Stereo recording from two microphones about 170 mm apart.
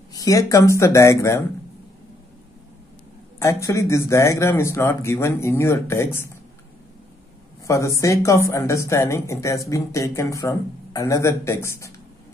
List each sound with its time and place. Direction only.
0.1 s speech: 20° left (ahead or behind)
3.3 s speech: 15° left (ahead or behind)
7.6 s speech: 20° left (ahead or behind)